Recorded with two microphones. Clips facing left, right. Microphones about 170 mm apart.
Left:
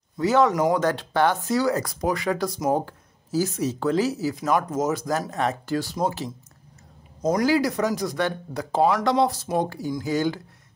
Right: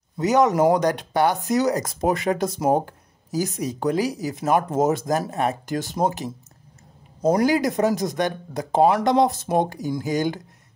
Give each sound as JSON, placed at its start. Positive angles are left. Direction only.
{"t": 0.2, "sound": "speech", "side_deg": -20}
{"t": 7.4, "sound": "speech", "side_deg": -20}